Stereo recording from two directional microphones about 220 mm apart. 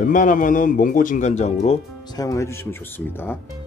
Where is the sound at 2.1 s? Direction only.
15° left (ahead or behind).